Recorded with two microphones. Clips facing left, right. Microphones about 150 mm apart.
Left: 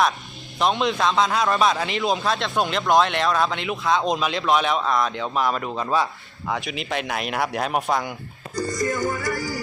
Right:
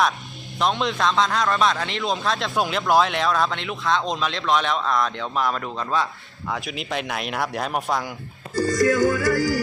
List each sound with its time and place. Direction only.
0.6 s a man's voice: centre (ahead or behind)
6.5 s a man's voice: centre (ahead or behind)
8.8 s music: 90° right